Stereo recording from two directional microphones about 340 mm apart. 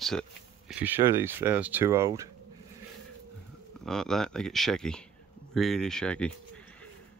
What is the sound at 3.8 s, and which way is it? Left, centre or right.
Speech, centre.